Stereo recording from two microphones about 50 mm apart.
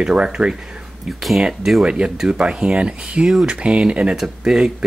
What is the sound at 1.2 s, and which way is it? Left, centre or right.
Speech, centre.